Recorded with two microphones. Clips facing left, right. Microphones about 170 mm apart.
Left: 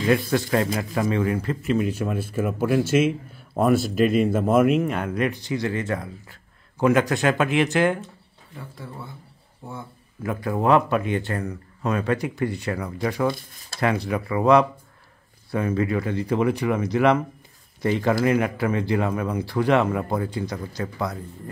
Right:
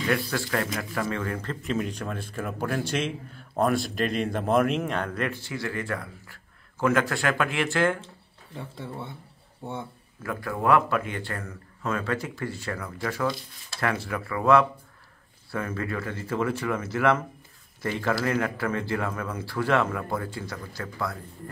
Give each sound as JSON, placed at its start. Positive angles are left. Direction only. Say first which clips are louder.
{"t": 0.0, "sound": "speech", "louder": "left 6 dB", "side_deg": 20}
{"t": 8.5, "sound": "speech", "louder": "right 2 dB", "side_deg": -25}
{"t": 10.2, "sound": "speech", "louder": "left 4 dB", "side_deg": 20}